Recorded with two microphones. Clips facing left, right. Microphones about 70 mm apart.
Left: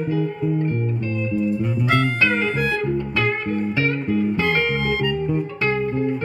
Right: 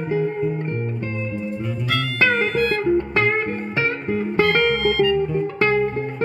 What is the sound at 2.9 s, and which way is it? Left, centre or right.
Music, right.